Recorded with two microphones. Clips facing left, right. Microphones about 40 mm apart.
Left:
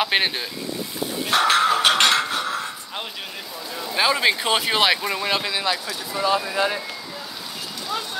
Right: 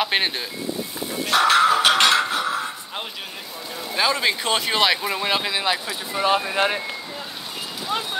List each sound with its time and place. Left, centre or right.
0.0 s speech: centre
1.3 s a sound: centre
3.9 s speech: centre
6.2 s speech: right